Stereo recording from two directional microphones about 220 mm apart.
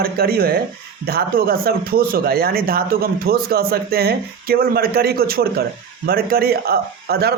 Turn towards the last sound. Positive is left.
turn(degrees=-45)  # may be behind; listen again after turning